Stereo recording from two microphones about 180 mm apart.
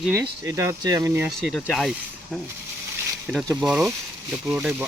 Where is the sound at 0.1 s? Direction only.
15° right (ahead or behind).